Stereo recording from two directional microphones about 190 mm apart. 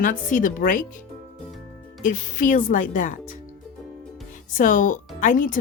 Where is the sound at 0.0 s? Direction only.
45° left (ahead or behind).